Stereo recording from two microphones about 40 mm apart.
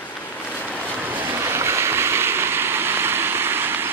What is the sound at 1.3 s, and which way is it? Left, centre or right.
Stream, right.